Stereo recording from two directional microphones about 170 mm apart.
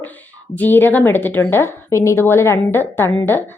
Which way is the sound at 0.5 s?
10° left (ahead or behind).